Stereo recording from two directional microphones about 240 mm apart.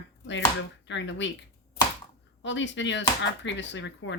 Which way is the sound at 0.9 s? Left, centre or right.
Left.